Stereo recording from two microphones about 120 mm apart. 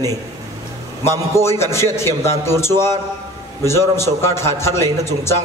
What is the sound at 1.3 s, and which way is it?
A man's voice, 20° left (ahead or behind).